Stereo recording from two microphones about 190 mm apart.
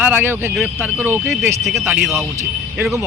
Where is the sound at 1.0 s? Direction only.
10° right (ahead or behind).